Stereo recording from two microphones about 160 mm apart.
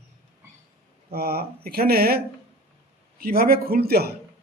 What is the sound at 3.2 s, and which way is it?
Speech, 70° right (ahead or behind).